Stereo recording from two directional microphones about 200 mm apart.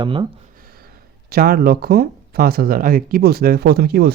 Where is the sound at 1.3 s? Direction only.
45° right (ahead or behind).